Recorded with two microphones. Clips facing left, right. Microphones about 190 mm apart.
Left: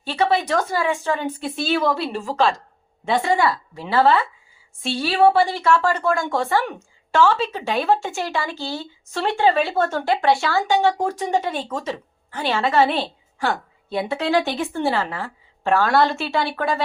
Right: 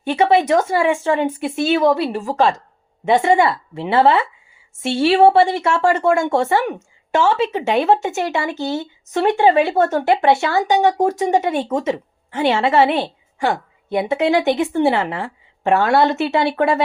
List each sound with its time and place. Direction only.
0.0 s a woman's voice: 20° right (ahead or behind)